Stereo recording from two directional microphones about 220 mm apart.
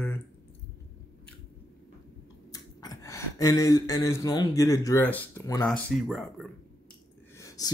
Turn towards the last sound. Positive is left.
turn(degrees=15)  # may be behind; listen again after turning